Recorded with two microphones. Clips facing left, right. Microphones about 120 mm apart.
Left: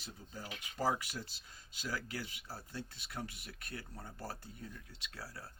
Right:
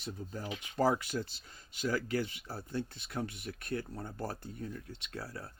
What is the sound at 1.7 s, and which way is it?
Speech, 55° right (ahead or behind).